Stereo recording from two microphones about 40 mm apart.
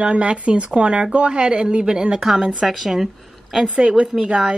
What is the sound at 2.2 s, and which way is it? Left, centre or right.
A woman's voice, centre.